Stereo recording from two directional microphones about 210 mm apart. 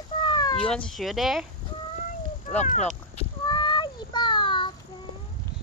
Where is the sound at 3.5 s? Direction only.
20° left (ahead or behind).